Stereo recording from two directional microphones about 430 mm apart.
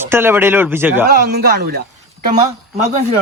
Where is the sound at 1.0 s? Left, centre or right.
Right.